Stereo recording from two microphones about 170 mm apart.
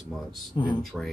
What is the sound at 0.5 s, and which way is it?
Speech, 25° left (ahead or behind).